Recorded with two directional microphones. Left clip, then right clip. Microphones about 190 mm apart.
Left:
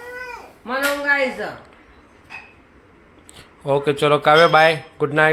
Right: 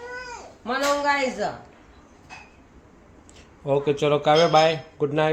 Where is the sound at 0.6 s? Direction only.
60° right (ahead or behind).